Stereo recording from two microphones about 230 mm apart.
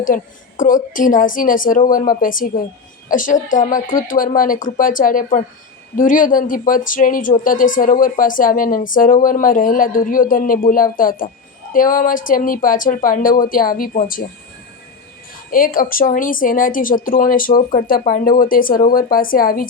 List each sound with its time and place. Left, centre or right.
0.0 s speech: left
15.5 s speech: left